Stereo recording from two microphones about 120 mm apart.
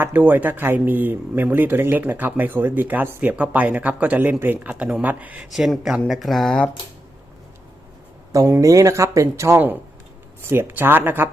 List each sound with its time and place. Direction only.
0.0 s speech: 15° right (ahead or behind)
5.5 s speech: centre (ahead or behind)
8.3 s speech: 25° right (ahead or behind)